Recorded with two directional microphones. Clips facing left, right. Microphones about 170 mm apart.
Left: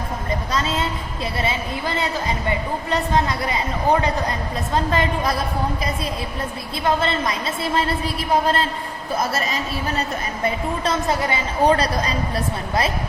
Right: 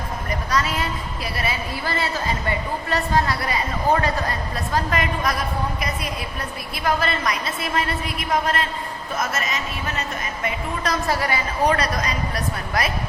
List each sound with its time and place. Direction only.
0.3 s a woman's voice: 25° left (ahead or behind)
6.7 s a woman's voice: 25° left (ahead or behind)
11.0 s a woman's voice: 20° left (ahead or behind)